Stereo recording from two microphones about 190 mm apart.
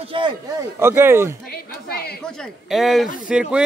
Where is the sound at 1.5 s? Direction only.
55° left (ahead or behind).